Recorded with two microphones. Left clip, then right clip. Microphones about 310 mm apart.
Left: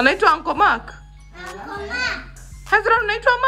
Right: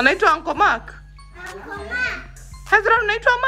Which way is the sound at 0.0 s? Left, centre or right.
Centre.